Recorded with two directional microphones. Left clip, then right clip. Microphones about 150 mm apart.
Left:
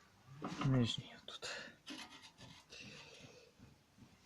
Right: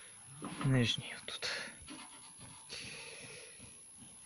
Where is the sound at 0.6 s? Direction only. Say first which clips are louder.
Right 6 dB; 10° right (ahead or behind).